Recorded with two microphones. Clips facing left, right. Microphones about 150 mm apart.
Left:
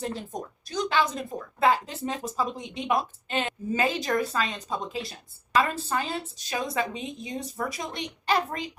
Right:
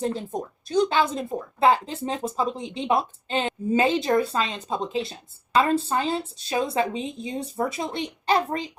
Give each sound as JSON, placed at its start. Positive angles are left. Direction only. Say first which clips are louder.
{"t": 0.3, "sound": "speech", "louder": "right 5 dB", "side_deg": -25}